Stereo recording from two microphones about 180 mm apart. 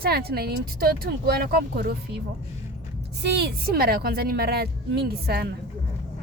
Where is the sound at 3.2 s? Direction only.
65° right (ahead or behind).